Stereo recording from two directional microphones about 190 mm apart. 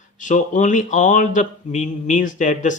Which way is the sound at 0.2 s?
40° left (ahead or behind).